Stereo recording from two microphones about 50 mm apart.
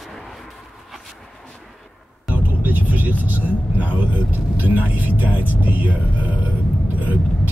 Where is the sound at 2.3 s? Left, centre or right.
Right.